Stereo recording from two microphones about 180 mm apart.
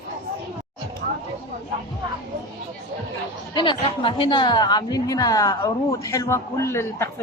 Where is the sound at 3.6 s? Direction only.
25° left (ahead or behind).